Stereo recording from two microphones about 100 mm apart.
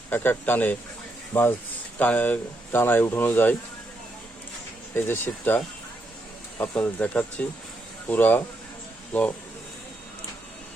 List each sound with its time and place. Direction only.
0.1 s speech: 20° left (ahead or behind)
4.9 s speech: 20° left (ahead or behind)